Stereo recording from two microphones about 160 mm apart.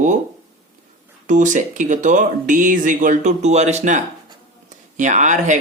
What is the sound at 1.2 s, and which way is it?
Speech, 50° right (ahead or behind).